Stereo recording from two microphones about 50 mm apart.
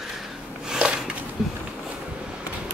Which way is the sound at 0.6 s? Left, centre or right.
Centre.